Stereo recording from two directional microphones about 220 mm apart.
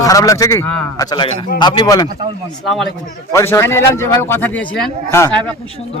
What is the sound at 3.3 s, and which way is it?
A man's voice, 15° left (ahead or behind).